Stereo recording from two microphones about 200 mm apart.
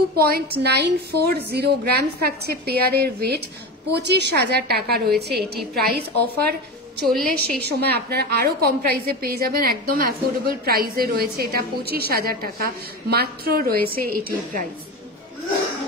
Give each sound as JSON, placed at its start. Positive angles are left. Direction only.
{"t": 0.1, "sound": "a woman's voice", "side_deg": -50}
{"t": 7.0, "sound": "a woman's voice", "side_deg": 5}
{"t": 7.6, "sound": "a woman's voice", "side_deg": -55}